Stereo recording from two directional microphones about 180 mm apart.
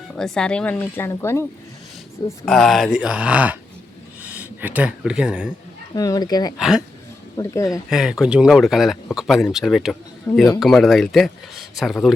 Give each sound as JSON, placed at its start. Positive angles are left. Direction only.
{"t": 0.2, "sound": "speech", "side_deg": 5}
{"t": 2.4, "sound": "speech", "side_deg": 0}
{"t": 5.9, "sound": "speech", "side_deg": 20}
{"t": 6.6, "sound": "speech", "side_deg": -5}
{"t": 7.3, "sound": "speech", "side_deg": 20}
{"t": 7.9, "sound": "speech", "side_deg": -5}
{"t": 10.3, "sound": "speech", "side_deg": 15}
{"t": 10.6, "sound": "speech", "side_deg": 0}